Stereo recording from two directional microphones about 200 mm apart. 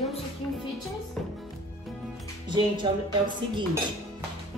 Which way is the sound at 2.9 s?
20° right (ahead or behind).